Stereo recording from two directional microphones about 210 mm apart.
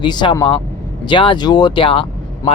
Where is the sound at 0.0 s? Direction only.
20° left (ahead or behind).